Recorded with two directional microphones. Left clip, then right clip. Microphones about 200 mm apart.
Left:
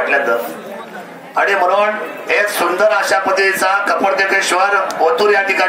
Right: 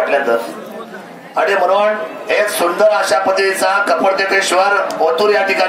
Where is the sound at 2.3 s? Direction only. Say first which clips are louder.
Even; 60° right (ahead or behind).